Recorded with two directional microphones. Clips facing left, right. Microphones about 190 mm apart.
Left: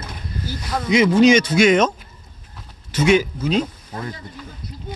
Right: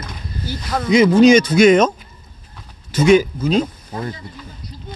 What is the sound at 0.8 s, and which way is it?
Speech, 40° right (ahead or behind).